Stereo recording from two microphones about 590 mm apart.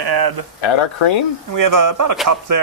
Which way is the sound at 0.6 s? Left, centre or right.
Left.